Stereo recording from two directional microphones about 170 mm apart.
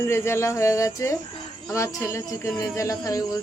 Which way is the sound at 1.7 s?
15° left (ahead or behind).